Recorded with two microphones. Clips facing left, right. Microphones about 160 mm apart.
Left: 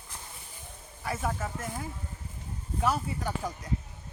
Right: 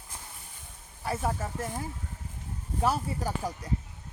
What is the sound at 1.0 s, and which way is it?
Speech, 30° right (ahead or behind).